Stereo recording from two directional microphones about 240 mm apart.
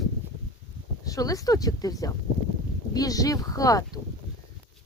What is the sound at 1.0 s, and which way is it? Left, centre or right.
Speech, centre.